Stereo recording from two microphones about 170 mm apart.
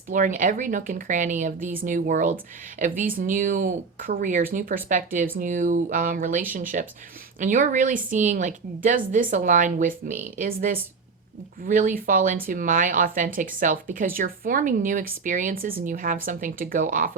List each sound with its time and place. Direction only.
0.1 s speech: 50° right (ahead or behind)